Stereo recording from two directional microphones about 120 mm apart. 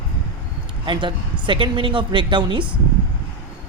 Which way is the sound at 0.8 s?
40° right (ahead or behind).